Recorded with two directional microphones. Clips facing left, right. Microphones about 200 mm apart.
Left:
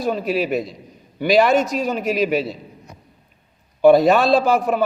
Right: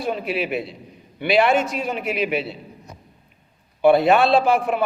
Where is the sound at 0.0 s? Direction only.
40° left (ahead or behind).